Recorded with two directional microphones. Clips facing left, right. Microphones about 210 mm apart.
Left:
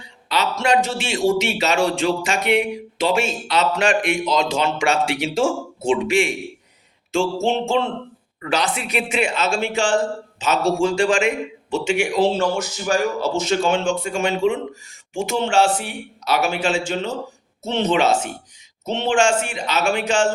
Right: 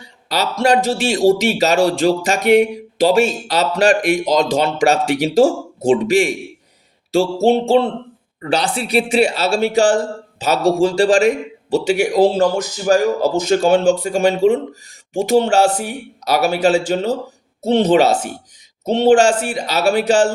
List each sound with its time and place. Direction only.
0.0 s speech: 40° right (ahead or behind)